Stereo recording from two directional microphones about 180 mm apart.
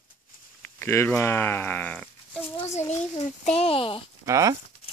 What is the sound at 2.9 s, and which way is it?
A child's voice, 40° left (ahead or behind).